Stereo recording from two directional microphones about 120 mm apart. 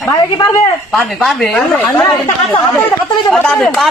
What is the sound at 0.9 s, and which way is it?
Speech, centre (ahead or behind).